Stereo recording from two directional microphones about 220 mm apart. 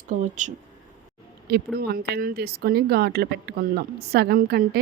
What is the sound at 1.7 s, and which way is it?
Speech, 45° right (ahead or behind).